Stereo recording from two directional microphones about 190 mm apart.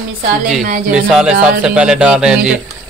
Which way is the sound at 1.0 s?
5° right (ahead or behind).